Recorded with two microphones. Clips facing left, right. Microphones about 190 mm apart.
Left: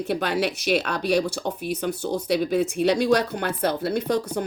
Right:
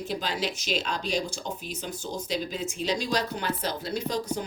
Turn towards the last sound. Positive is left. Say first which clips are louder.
# left 6 dB
turn(degrees=60)  # may be behind; listen again after turning